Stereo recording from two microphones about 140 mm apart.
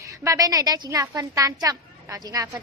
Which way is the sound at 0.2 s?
25° right (ahead or behind).